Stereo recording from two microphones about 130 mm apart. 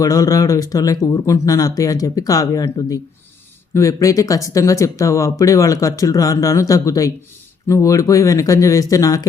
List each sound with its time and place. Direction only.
0.0 s speech: 25° left (ahead or behind)